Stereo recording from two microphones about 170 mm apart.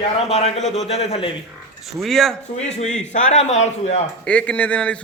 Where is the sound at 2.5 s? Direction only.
40° left (ahead or behind).